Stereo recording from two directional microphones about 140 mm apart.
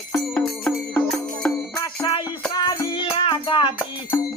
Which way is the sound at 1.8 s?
25° left (ahead or behind).